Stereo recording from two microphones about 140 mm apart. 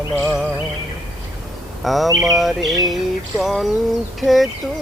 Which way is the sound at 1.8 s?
Centre (ahead or behind).